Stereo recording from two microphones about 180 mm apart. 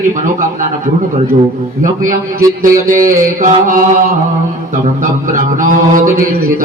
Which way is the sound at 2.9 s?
45° right (ahead or behind).